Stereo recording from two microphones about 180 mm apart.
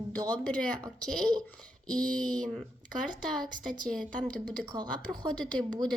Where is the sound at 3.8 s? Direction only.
5° left (ahead or behind).